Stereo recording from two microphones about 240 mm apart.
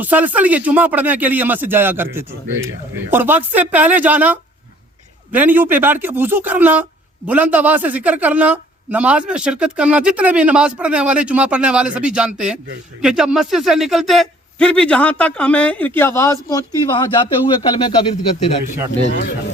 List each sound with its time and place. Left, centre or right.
0.0 s speech: centre; by 18.5 s left